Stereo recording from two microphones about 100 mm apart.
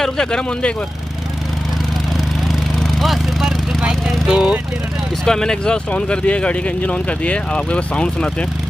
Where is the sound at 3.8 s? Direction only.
5° right (ahead or behind).